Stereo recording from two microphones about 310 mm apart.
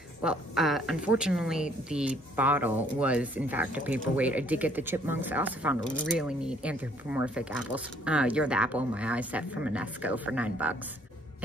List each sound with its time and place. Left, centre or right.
0.2 s a woman's voice: centre